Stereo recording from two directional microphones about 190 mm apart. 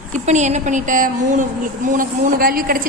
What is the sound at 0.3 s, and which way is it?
A woman's voice, 40° right (ahead or behind).